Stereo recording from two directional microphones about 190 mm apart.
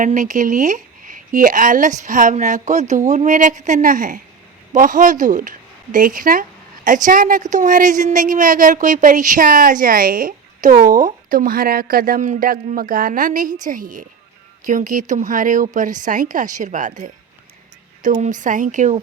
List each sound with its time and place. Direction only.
0.0 s a woman's voice: 45° right (ahead or behind)